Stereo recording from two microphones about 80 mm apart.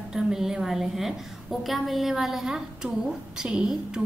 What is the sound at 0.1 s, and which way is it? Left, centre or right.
A woman's voice, centre.